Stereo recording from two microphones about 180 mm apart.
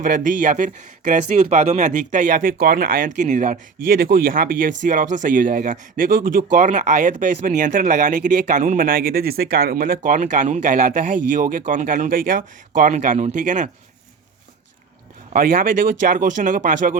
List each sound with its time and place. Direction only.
0.0 s speech: 50° right (ahead or behind)
15.3 s speech: 50° right (ahead or behind)